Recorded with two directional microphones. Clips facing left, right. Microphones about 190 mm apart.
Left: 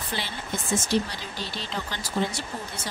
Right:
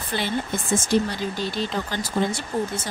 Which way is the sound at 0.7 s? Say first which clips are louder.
Right 4 dB; 50° right (ahead or behind).